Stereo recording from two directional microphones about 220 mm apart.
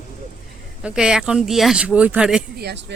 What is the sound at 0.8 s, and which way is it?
Speech, 5° right (ahead or behind).